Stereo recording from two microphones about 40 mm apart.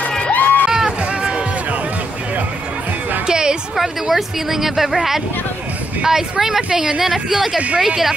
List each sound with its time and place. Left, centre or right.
0.3 s crowd: left
0.7 s run: centre
3.3 s a sound: centre
3.7 s speech: centre